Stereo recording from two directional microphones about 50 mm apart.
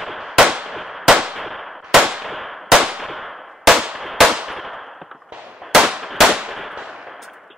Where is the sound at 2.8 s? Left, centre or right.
Centre.